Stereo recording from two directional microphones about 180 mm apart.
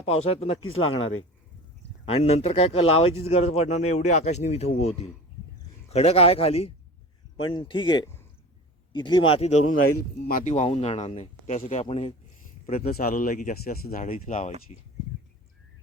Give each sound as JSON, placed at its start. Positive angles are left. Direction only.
{"t": 0.0, "sound": "speech", "side_deg": 35}
{"t": 2.0, "sound": "speech", "side_deg": 35}
{"t": 10.0, "sound": "speech", "side_deg": 55}
{"t": 12.9, "sound": "speech", "side_deg": 55}